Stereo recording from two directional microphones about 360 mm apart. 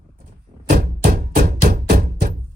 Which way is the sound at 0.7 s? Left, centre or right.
Right.